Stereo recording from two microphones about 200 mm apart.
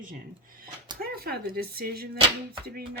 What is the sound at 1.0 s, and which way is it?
Speech, 50° right (ahead or behind).